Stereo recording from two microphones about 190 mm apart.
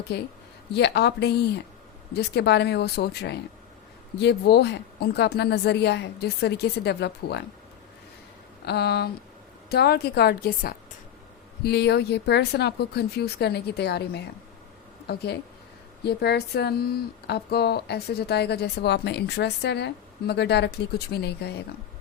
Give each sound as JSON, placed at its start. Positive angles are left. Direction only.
{"t": 0.1, "sound": "speech", "side_deg": 60}
{"t": 8.6, "sound": "speech", "side_deg": 60}